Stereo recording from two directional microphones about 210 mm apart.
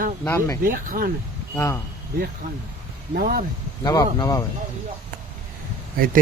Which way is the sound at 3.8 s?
15° left (ahead or behind).